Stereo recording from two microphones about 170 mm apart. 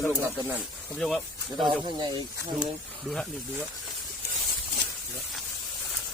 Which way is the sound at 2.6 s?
Centre (ahead or behind).